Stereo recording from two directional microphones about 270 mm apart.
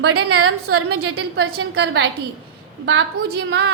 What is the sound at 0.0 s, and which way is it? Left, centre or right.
A woman's voice, right.